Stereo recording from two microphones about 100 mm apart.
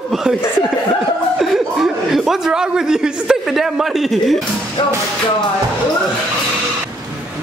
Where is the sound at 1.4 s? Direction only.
5° right (ahead or behind).